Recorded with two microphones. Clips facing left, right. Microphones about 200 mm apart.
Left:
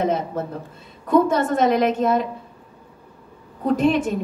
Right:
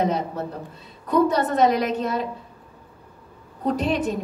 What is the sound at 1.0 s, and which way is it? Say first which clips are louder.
A woman's voice: left 2 dB; 50° left (ahead or behind).